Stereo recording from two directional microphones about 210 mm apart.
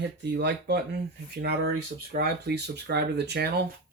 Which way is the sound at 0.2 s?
55° right (ahead or behind).